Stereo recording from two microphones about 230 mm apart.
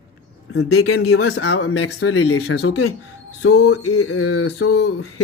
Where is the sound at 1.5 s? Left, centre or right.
Left.